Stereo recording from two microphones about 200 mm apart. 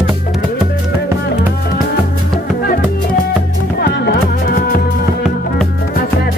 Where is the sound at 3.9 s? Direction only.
50° left (ahead or behind).